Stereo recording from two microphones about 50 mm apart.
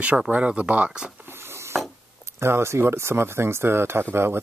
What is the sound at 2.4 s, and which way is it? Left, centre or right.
Speech, right.